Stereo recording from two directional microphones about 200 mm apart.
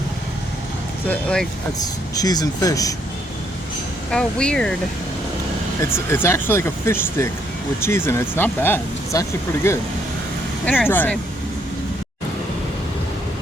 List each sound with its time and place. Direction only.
1.0 s speech: 5° left (ahead or behind)
1.8 s speech: 20° left (ahead or behind)
4.1 s speech: 5° left (ahead or behind)
5.8 s speech: 15° left (ahead or behind)